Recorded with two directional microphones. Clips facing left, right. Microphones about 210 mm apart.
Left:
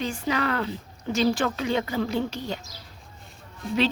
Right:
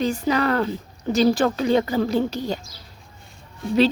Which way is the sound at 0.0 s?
40° right (ahead or behind).